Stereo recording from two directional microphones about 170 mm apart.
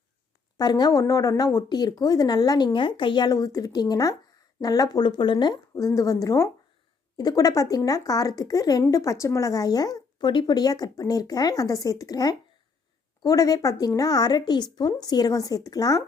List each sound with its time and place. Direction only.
0.5 s speech: 25° left (ahead or behind)